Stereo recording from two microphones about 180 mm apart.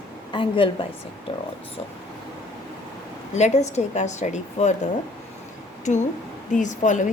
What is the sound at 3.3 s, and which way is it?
Speech, 40° left (ahead or behind).